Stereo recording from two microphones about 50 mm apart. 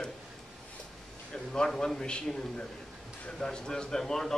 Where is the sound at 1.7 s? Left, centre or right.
Centre.